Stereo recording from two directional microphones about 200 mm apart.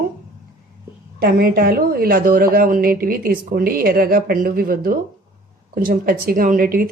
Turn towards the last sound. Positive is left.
turn(degrees=-45)  # may be behind; listen again after turning